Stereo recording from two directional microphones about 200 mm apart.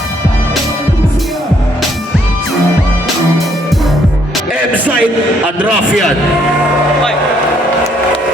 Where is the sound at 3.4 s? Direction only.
Centre (ahead or behind).